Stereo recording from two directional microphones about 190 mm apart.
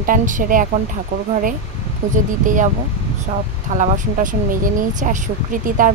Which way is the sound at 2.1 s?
40° right (ahead or behind).